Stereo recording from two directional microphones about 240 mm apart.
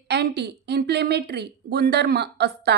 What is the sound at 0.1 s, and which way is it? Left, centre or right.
A woman's voice, right.